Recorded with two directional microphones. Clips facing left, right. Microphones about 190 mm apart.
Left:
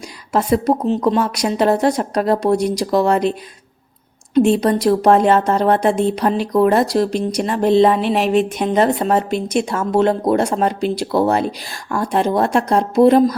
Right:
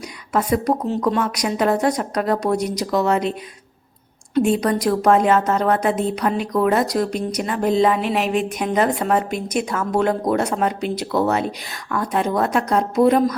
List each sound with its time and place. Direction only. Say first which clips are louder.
0.3 s speech: left 3 dB; 25° left (ahead or behind)
4.4 s speech: left 4 dB; 25° left (ahead or behind)